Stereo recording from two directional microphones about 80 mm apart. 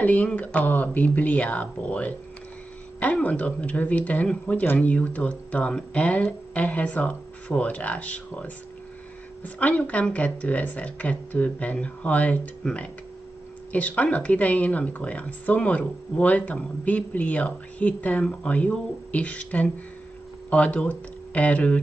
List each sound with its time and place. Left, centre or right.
0.0 s speech: centre